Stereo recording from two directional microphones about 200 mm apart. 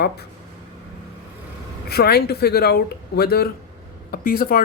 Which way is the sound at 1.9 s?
50° left (ahead or behind).